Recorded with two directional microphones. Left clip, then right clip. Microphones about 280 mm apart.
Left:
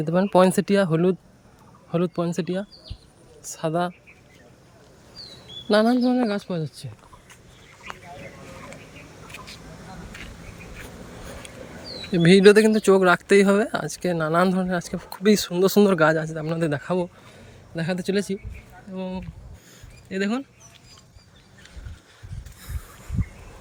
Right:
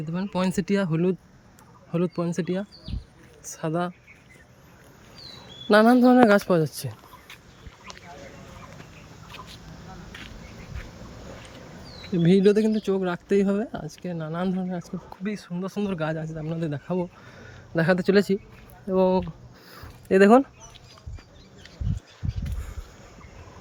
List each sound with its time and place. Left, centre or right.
0.0 s speech: centre
5.6 s speech: centre
12.1 s speech: centre
15.5 s speech: left
15.9 s speech: centre
17.7 s speech: centre